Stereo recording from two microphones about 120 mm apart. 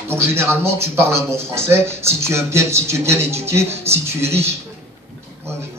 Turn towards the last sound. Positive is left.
turn(degrees=-20)  # may be behind; listen again after turning